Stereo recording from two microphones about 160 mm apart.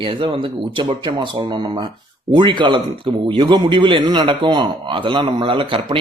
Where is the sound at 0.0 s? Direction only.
30° right (ahead or behind).